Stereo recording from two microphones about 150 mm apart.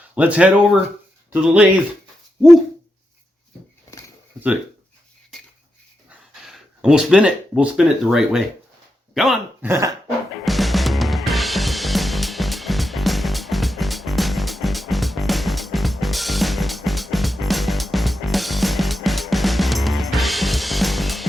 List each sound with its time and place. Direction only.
0.1 s speech: 10° right (ahead or behind)
6.4 s speech: 5° right (ahead or behind)
9.6 s cough: 20° right (ahead or behind)
10.4 s music: centre (ahead or behind)